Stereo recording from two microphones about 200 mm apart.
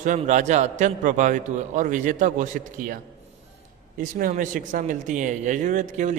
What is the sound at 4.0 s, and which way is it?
Speech, 45° right (ahead or behind).